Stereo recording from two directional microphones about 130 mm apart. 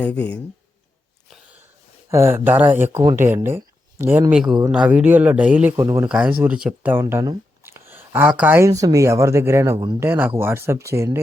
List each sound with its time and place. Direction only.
0.0 s speech: 10° left (ahead or behind)
2.0 s a man's voice: 20° right (ahead or behind)
5.8 s speech: 25° right (ahead or behind)
6.1 s a man's voice: 10° right (ahead or behind)
7.0 s speech: 25° right (ahead or behind)